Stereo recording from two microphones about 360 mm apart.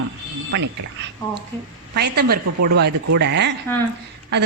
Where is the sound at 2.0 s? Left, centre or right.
Right.